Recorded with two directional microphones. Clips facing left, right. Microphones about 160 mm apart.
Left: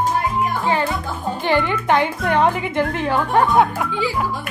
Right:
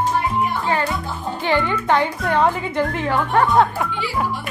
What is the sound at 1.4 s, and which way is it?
A woman's voice, 15° left (ahead or behind).